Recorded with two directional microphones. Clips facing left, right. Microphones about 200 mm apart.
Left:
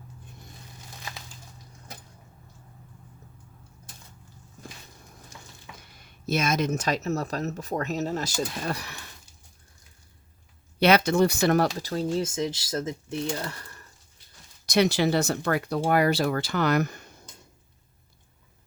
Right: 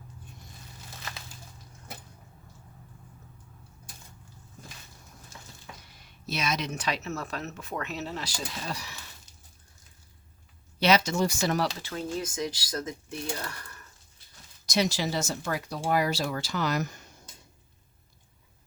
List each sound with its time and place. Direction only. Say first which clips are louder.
6.0 s speech: left 7 dB; 50° left (ahead or behind)
10.8 s speech: left 4 dB; 55° left (ahead or behind)
11.8 s speech: left 6 dB; 35° left (ahead or behind)
14.7 s speech: left 6 dB; 60° left (ahead or behind)